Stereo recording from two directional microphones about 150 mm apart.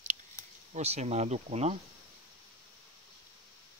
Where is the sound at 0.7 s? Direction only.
45° right (ahead or behind).